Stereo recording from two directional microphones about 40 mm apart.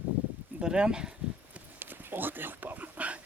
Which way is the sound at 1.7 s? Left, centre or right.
Right.